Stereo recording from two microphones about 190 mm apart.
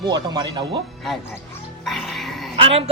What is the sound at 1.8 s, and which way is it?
Music, centre (ahead or behind).